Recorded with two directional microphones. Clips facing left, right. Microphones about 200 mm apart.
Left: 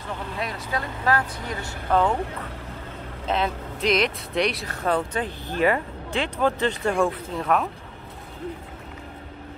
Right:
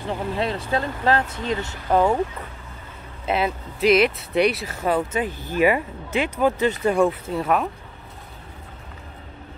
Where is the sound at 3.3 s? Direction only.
5° right (ahead or behind).